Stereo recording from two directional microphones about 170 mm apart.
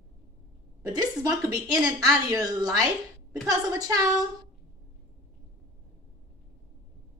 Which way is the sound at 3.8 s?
20° right (ahead or behind).